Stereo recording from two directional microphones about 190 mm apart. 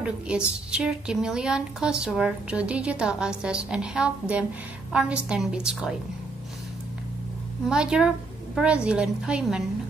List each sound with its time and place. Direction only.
0.7 s a woman's voice: 5° right (ahead or behind)
7.6 s a woman's voice: 5° right (ahead or behind)